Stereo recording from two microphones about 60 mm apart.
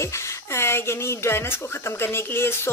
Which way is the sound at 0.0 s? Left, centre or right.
Left.